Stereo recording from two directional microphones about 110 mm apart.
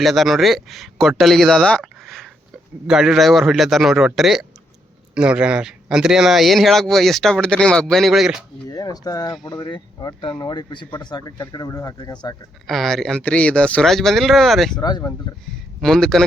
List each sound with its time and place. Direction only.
0.0 s speech: centre (ahead or behind)
1.8 s a sound: centre (ahead or behind)
2.8 s speech: 5° right (ahead or behind)
8.7 s speech: 35° left (ahead or behind)
11.9 s speech: 45° left (ahead or behind)
12.6 s speech: centre (ahead or behind)
14.8 s speech: 35° left (ahead or behind)
15.4 s speech: 5° left (ahead or behind)